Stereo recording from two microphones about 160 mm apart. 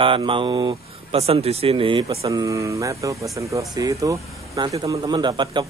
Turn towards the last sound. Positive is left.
turn(degrees=-30)  # may be behind; listen again after turning